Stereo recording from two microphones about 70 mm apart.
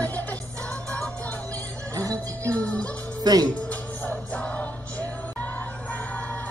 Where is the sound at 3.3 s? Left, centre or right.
Right.